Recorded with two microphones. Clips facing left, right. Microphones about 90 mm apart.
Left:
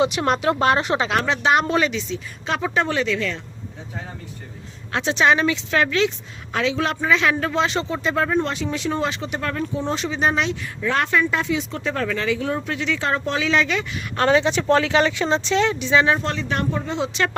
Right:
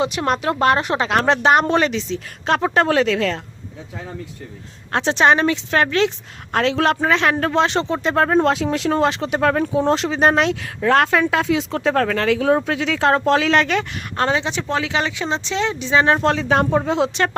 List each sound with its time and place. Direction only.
0.2 s speech: 5° left (ahead or behind)
1.1 s a woman's voice: 45° right (ahead or behind)
2.7 s speech: 70° right (ahead or behind)
4.9 s a woman's voice: 40° right (ahead or behind); by 6.9 s 60° right (ahead or behind)
6.9 s a woman's voice: 45° right (ahead or behind)
8.4 s speech: 85° right
8.9 s speech: 65° right (ahead or behind)
10.8 s speech: 65° right (ahead or behind)
14.2 s speech: 25° right (ahead or behind)
15.8 s speech: 35° right (ahead or behind)
16.2 s speech: 90° right